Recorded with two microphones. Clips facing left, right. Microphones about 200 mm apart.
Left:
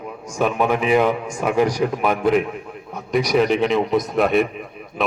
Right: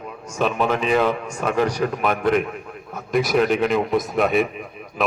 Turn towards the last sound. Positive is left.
turn(degrees=0)  # may be behind; listen again after turning